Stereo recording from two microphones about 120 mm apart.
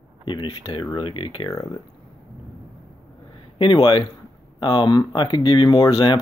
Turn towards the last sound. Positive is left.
turn(degrees=40)  # may be behind; listen again after turning